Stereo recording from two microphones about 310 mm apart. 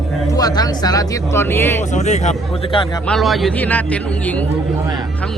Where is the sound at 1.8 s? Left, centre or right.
Left.